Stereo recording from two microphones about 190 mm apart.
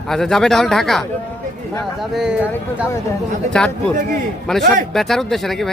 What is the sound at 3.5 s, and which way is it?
Speech, 5° left (ahead or behind).